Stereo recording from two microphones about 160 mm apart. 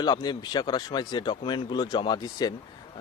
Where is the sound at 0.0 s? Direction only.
25° left (ahead or behind).